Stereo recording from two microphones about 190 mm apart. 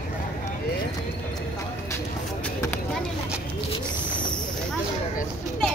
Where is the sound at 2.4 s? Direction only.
10° left (ahead or behind).